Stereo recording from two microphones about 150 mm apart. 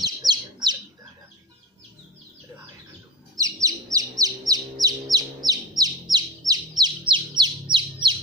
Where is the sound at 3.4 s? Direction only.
20° right (ahead or behind).